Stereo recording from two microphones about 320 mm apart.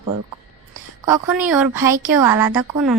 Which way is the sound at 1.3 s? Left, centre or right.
Centre.